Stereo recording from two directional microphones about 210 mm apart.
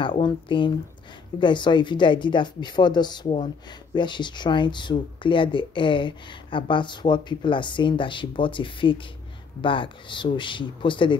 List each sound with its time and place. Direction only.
0.0 s speech: 20° left (ahead or behind)